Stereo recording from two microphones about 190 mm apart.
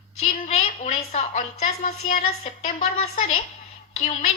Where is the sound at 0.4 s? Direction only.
35° left (ahead or behind).